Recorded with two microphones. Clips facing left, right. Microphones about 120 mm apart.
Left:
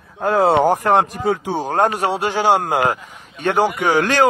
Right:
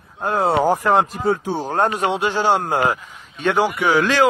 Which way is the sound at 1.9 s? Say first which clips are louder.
Even; 40° left (ahead or behind).